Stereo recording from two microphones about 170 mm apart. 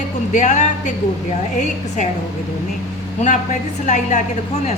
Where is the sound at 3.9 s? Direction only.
45° left (ahead or behind).